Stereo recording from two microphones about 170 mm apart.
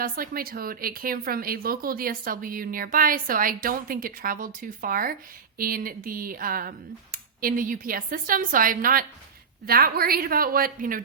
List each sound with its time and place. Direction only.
0.0 s a woman's voice: 60° right (ahead or behind)